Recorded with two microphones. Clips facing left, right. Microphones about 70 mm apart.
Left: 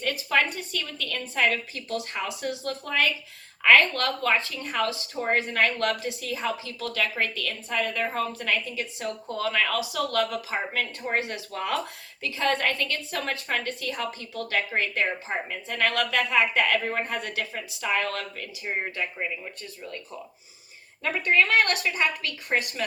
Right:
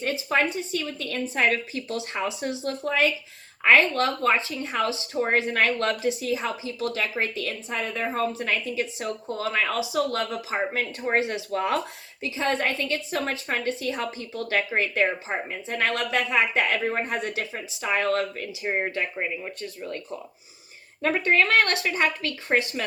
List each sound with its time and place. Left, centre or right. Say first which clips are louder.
0.0 s speech: right 1 dB; right
21.0 s a woman's voice: right 1 dB; right